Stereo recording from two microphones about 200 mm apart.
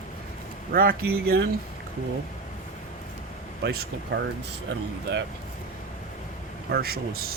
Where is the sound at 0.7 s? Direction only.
50° right (ahead or behind).